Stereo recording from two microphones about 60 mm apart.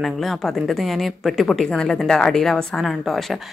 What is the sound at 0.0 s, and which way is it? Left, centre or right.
Speech, centre.